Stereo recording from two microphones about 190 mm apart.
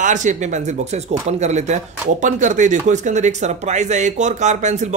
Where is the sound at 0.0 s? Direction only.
40° right (ahead or behind).